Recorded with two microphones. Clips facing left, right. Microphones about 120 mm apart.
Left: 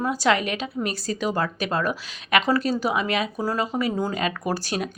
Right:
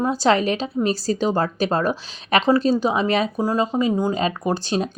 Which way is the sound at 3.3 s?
20° right (ahead or behind).